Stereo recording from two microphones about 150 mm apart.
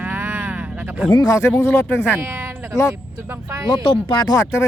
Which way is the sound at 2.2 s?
15° right (ahead or behind).